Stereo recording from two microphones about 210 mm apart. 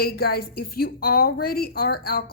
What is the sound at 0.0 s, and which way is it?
A woman's voice, 45° left (ahead or behind).